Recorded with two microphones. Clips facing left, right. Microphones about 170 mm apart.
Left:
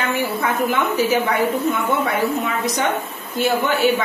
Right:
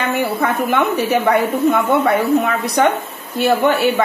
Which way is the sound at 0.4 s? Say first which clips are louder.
Right 3 dB; 65° right (ahead or behind).